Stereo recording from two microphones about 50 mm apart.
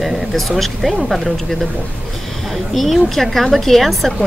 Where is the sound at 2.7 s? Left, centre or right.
Centre.